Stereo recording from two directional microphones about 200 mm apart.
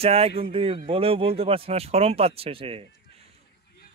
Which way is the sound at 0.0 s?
30° right (ahead or behind).